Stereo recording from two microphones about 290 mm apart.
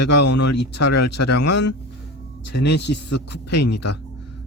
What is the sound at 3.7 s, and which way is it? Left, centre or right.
Speech, left.